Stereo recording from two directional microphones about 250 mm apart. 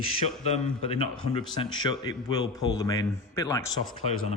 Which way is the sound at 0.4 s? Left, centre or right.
Left.